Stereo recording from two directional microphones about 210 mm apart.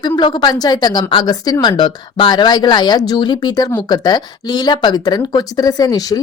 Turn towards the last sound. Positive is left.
turn(degrees=15)  # may be behind; listen again after turning